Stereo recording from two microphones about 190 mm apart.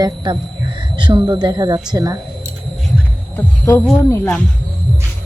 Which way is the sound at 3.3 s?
15° left (ahead or behind).